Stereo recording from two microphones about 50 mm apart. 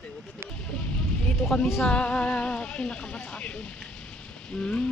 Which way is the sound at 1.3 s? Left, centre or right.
Centre.